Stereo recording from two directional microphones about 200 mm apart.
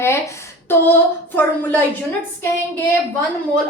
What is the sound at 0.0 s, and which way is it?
A woman's voice, 15° left (ahead or behind).